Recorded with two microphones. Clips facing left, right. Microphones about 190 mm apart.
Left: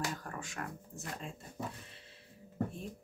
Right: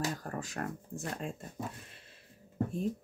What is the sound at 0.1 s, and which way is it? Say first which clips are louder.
Speech: right 4 dB; 40° right (ahead or behind).